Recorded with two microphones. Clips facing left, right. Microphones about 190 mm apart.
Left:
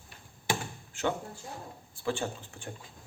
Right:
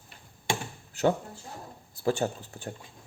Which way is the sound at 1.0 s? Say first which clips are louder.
Right 6 dB; 35° right (ahead or behind).